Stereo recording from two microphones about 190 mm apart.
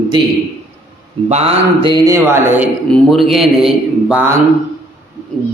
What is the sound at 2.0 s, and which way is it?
Speech, 15° right (ahead or behind).